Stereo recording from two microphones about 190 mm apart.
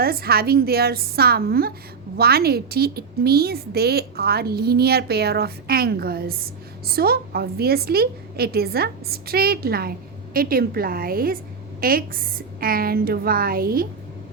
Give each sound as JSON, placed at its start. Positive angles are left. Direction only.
{"t": 0.0, "sound": "a woman's voice", "side_deg": -55}